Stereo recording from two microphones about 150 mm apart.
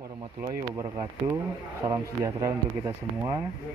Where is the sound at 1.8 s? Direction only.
20° right (ahead or behind).